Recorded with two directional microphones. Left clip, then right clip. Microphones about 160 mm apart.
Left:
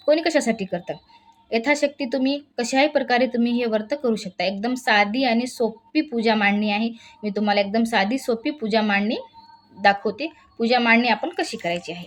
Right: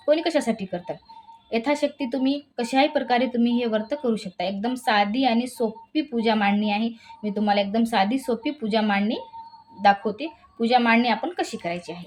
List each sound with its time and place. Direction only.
0.0 s a woman's voice: 20° left (ahead or behind)